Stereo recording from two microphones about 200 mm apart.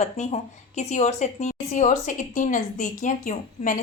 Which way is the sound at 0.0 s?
35° left (ahead or behind).